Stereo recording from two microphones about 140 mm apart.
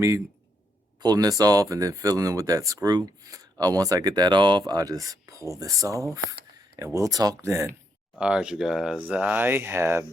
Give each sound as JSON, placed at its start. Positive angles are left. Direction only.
{"t": 1.0, "sound": "speech", "side_deg": -25}
{"t": 8.2, "sound": "speech", "side_deg": -5}